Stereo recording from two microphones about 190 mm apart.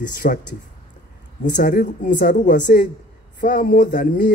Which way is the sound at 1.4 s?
45° left (ahead or behind).